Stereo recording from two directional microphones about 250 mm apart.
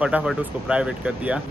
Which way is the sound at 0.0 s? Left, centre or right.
Centre.